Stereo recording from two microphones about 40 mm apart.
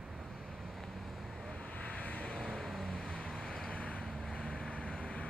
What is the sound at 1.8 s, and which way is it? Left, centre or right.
Vehicle, left.